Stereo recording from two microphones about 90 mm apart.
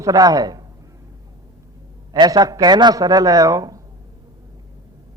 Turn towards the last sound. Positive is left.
turn(degrees=-40)  # may be behind; listen again after turning